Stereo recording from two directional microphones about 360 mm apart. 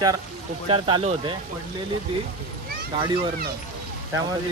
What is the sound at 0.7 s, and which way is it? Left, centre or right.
Speech, centre.